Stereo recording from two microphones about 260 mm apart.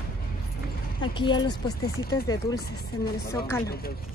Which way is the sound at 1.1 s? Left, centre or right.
Centre.